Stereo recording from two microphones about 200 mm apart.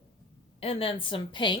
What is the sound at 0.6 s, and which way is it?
Speech, 30° left (ahead or behind).